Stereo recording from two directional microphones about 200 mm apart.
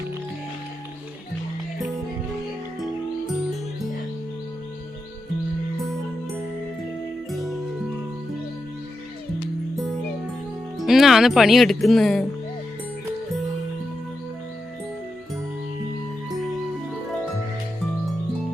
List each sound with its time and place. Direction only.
7.3 s music: centre (ahead or behind)
10.8 s speech: centre (ahead or behind)